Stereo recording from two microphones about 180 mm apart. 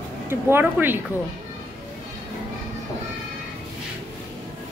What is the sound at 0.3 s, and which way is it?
Speech, 10° right (ahead or behind).